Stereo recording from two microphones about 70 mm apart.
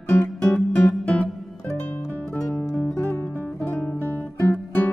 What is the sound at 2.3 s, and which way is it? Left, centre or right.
Music, centre.